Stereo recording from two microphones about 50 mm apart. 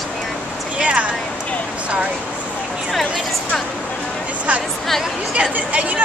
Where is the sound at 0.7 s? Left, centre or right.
Right.